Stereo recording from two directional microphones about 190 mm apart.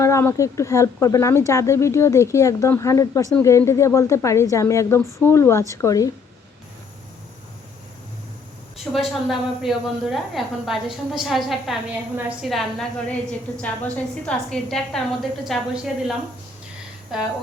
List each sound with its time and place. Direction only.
0.0 s speech: 15° left (ahead or behind)
8.9 s a woman's voice: centre (ahead or behind)